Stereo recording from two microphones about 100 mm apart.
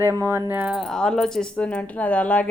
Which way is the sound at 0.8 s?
5° left (ahead or behind).